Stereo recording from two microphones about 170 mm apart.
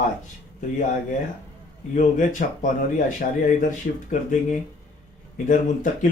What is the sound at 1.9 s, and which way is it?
Speech, 50° left (ahead or behind).